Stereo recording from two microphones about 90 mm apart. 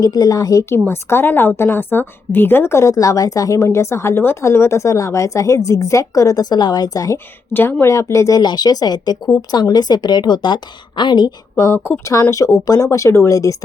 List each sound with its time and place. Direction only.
0.0 s speech: 45° left (ahead or behind)
0.6 s a woman's voice: 30° left (ahead or behind)
7.5 s speech: 20° left (ahead or behind)
7.9 s a woman's voice: 35° left (ahead or behind)
8.4 s speech: 50° left (ahead or behind)
11.5 s speech: 30° left (ahead or behind)
12.3 s a woman's voice: 40° left (ahead or behind)